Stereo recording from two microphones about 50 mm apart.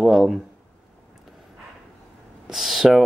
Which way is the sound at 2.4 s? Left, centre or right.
Centre.